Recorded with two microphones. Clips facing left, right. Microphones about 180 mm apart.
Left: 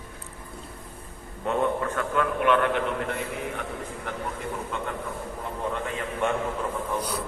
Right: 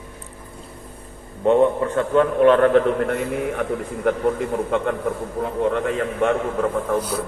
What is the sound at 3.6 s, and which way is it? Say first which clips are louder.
A man's voice: right 11 dB; 55° right (ahead or behind).